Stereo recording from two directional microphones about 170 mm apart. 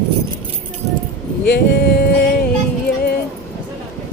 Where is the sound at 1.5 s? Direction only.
85° left; by 2.4 s 65° left (ahead or behind).